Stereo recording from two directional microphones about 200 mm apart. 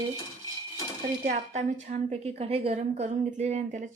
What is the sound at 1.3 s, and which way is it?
A woman's voice, 40° right (ahead or behind).